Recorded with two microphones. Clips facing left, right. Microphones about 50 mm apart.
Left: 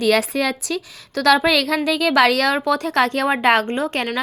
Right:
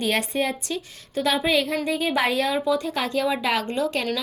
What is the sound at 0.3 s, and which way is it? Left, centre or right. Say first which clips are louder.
A woman's voice: left 4 dB; left.